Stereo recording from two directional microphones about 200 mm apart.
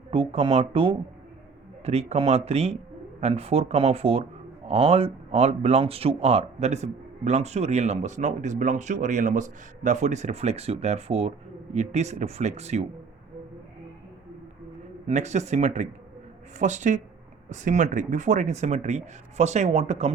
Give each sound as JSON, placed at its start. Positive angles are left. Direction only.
{"t": 0.1, "sound": "speech", "side_deg": -25}
{"t": 15.0, "sound": "speech", "side_deg": -35}